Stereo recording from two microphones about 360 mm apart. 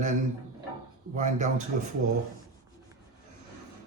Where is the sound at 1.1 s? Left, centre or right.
Right.